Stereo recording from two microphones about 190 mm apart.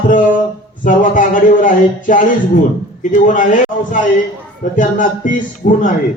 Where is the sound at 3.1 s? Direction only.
40° left (ahead or behind).